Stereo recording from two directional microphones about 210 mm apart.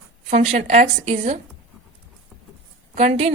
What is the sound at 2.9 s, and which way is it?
Speech, 30° right (ahead or behind).